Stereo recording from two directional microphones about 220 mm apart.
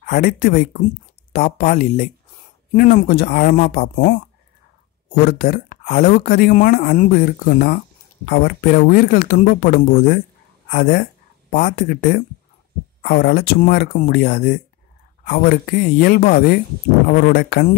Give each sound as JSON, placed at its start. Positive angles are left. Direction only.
{"t": 0.0, "sound": "speech", "side_deg": 40}
{"t": 5.2, "sound": "speech", "side_deg": 45}